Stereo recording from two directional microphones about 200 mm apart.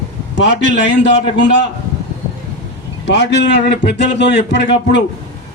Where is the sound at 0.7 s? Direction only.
60° left (ahead or behind).